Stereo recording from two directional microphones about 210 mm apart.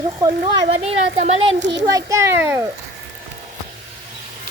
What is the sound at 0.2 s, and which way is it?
Speech, 20° right (ahead or behind).